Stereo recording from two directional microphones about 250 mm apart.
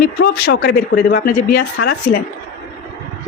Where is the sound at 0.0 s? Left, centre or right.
Left.